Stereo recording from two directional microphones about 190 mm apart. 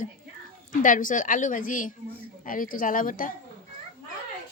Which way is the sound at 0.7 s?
45° left (ahead or behind).